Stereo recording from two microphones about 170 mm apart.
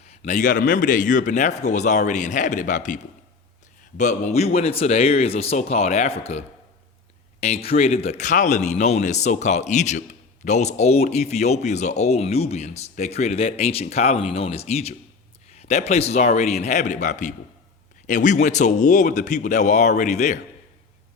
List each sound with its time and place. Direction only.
0.0 s speech: 40° left (ahead or behind)
7.4 s speech: 35° left (ahead or behind)